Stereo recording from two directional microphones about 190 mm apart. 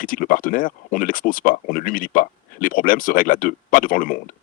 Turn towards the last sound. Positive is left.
turn(degrees=45)  # may be behind; listen again after turning